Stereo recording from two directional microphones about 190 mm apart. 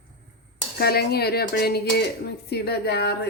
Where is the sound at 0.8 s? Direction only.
55° left (ahead or behind).